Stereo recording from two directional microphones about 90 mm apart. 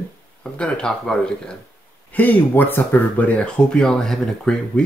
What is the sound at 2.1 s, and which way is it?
Speech, 20° left (ahead or behind).